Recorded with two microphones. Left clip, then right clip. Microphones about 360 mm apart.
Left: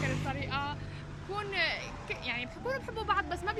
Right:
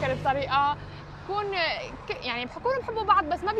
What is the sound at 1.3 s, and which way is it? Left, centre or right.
Speech, centre.